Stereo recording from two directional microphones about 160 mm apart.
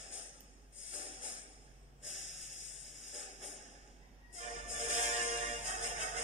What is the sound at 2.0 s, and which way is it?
Spray, 45° right (ahead or behind).